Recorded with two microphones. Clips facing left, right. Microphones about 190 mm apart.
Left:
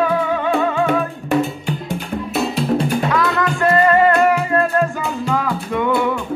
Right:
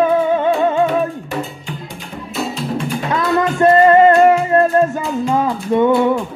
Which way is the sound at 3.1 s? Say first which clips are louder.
Right 2 dB; 20° right (ahead or behind).